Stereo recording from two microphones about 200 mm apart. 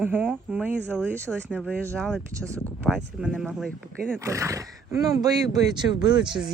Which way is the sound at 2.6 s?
Centre (ahead or behind).